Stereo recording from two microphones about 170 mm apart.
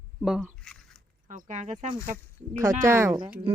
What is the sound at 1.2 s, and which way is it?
Speech, 45° right (ahead or behind).